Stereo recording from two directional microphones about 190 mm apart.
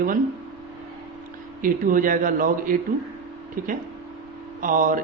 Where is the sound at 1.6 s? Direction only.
45° right (ahead or behind).